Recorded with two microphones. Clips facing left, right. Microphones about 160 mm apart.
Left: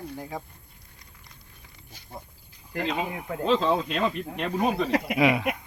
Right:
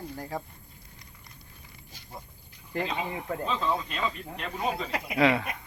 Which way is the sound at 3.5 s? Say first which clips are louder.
Left 8 dB; 75° left (ahead or behind).